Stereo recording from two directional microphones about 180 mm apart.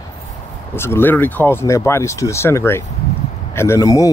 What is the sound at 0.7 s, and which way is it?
A man's voice, 15° left (ahead or behind).